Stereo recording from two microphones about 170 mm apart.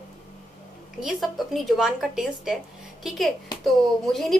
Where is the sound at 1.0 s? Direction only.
Centre (ahead or behind).